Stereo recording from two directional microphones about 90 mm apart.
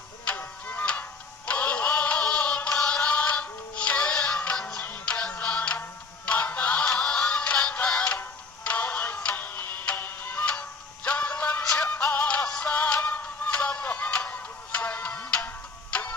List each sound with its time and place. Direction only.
0.3 s tick-tock: 20° left (ahead or behind)
1.5 s synthetic singing: 15° left (ahead or behind)
6.2 s music: 15° left (ahead or behind)